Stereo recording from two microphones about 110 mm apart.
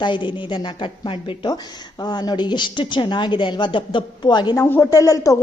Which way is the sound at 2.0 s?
40° left (ahead or behind).